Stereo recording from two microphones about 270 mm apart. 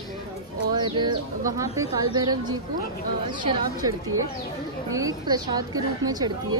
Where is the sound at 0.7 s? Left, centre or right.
Centre.